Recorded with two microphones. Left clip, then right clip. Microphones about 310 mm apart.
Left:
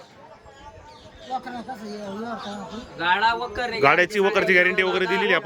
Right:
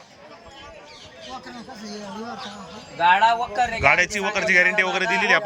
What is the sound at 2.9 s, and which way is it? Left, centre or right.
Speech, centre.